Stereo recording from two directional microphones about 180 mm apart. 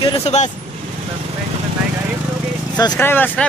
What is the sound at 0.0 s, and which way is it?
Speech, 35° left (ahead or behind).